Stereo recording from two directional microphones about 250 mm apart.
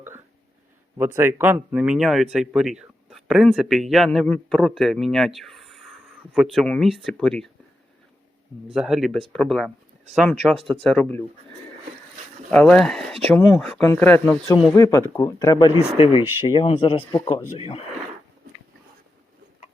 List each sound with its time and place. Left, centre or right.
0.9 s speech: centre
8.7 s speech: centre
12.5 s speech: centre; by 17.0 s left
17.0 s speech: centre